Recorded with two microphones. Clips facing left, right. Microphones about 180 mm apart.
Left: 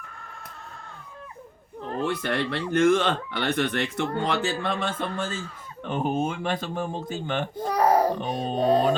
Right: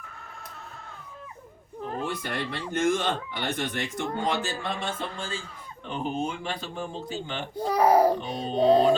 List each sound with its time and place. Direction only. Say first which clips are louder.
2.0 s speech: left 5 dB; 65° left (ahead or behind)
7.6 s a sound: right 1 dB; 10° right (ahead or behind)
8.2 s speech: even; 45° left (ahead or behind)